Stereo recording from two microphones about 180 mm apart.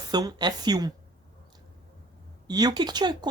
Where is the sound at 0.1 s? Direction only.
20° right (ahead or behind).